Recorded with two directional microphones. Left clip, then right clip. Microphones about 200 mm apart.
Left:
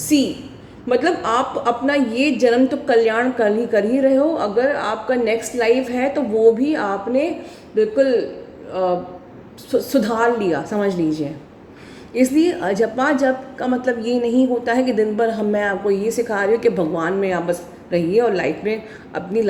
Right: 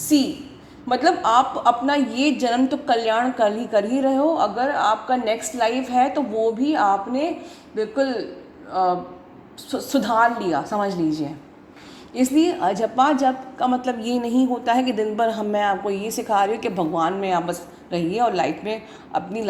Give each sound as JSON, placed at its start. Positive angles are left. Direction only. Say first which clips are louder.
{"t": 0.9, "sound": "a woman's voice", "louder": "left 1 dB", "side_deg": -20}